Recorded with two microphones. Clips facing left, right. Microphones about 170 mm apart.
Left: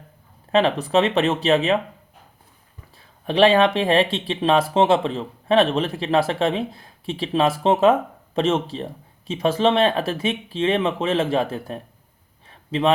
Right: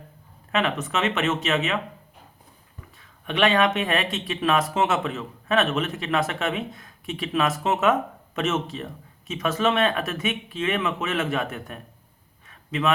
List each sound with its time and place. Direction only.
0.5 s speech: 30° left (ahead or behind)
3.0 s speech: 30° left (ahead or behind)
12.5 s a sound: 30° left (ahead or behind)